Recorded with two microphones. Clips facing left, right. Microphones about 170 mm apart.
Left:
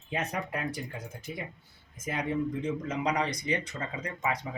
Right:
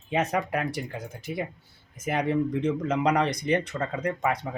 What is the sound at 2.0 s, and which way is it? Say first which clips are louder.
Speech: right 5 dB; 70° right (ahead or behind).